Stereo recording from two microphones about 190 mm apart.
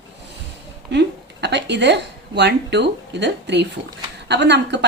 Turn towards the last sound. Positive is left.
turn(degrees=-65)  # may be behind; listen again after turning